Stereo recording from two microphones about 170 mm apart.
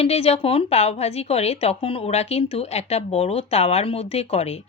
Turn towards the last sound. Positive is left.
turn(degrees=40)  # may be behind; listen again after turning